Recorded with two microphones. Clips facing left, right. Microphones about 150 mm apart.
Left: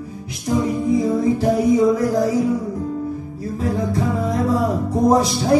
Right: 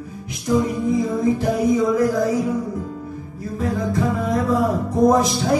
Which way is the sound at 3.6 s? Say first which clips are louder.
Even; 30° left (ahead or behind).